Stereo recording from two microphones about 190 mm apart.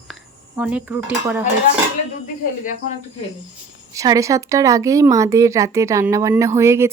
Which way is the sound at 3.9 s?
15° right (ahead or behind).